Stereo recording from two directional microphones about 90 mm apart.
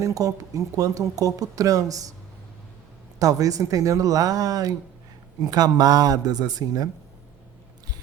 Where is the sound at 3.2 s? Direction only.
40° right (ahead or behind).